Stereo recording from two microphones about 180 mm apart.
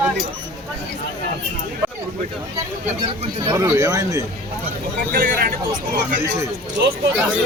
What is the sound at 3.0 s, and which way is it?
Speech, 25° right (ahead or behind).